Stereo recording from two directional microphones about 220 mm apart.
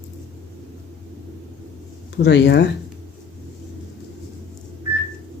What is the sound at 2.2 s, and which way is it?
Speech, 55° left (ahead or behind).